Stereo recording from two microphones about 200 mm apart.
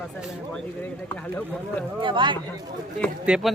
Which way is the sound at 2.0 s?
25° right (ahead or behind).